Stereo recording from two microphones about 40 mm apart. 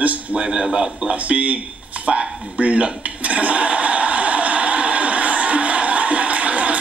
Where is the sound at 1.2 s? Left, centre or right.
Right.